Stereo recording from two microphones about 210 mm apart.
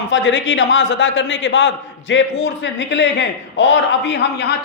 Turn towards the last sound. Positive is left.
turn(degrees=55)  # may be behind; listen again after turning